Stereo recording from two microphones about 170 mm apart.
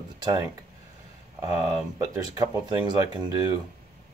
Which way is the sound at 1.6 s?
20° right (ahead or behind).